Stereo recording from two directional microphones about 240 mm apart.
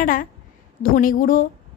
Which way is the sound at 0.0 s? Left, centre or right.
Left.